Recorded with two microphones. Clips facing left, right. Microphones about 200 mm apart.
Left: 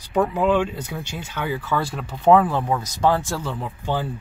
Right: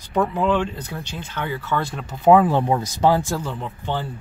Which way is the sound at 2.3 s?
20° right (ahead or behind).